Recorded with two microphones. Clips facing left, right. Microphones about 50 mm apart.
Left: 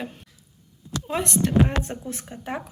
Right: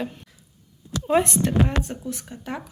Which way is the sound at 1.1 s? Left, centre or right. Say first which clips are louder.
Right 5 dB; right.